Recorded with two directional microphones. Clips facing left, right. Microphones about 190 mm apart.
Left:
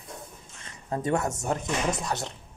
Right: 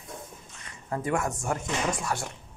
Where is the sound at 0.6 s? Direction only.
25° left (ahead or behind).